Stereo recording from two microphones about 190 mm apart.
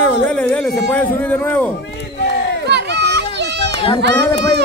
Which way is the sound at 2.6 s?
65° right (ahead or behind).